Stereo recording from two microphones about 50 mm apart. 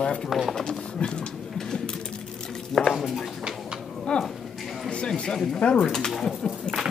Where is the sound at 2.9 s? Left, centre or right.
Centre.